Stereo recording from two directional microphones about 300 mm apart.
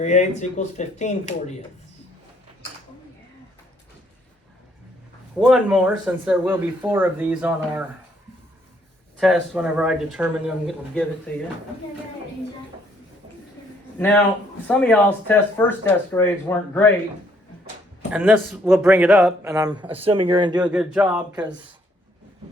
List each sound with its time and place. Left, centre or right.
0.0 s speech: left
5.4 s speech: centre
9.1 s speech: centre
14.7 s speech: centre
18.1 s a man's voice: centre
20.6 s speech: centre